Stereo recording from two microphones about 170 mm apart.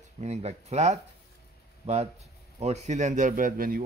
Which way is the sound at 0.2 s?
40° right (ahead or behind).